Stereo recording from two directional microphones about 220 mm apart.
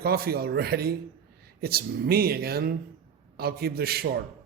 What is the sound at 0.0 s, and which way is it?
A man's voice, 45° right (ahead or behind).